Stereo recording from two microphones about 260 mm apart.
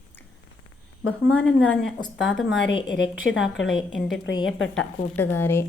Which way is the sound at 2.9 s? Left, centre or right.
Left.